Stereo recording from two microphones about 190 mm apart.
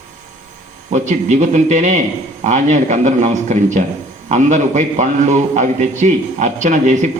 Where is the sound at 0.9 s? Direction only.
40° right (ahead or behind).